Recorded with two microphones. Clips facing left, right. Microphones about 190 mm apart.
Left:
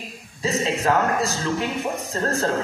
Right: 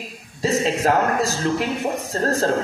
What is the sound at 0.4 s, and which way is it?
A woman's voice, 35° right (ahead or behind).